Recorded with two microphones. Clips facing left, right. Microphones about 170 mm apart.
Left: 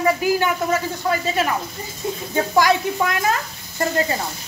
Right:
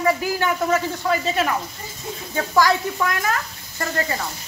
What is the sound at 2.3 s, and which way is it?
Speech, 20° left (ahead or behind).